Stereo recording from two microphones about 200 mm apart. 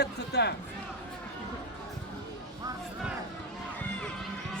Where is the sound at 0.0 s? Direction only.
55° left (ahead or behind).